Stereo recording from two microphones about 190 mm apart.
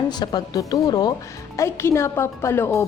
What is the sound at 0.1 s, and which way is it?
A woman's voice, 20° left (ahead or behind).